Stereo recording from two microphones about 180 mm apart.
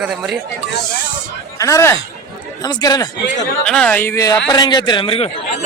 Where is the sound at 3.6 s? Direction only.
5° left (ahead or behind).